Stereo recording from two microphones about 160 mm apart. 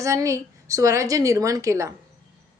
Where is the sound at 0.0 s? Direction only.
20° right (ahead or behind).